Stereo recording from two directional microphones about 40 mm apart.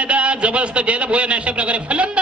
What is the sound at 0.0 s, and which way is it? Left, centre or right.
A man's voice, right.